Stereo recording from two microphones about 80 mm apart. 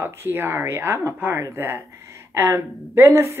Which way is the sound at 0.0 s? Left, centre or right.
Right.